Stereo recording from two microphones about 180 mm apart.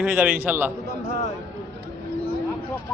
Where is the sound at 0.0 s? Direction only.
10° right (ahead or behind).